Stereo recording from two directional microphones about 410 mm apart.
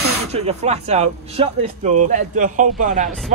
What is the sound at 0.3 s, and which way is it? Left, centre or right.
Speech, centre.